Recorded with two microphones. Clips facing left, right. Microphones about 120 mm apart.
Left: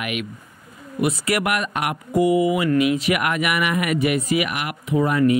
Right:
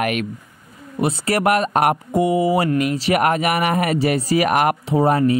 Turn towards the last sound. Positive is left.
turn(degrees=-35)  # may be behind; listen again after turning